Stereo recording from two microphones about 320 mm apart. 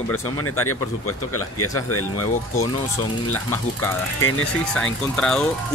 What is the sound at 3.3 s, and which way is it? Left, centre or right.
Speech, centre.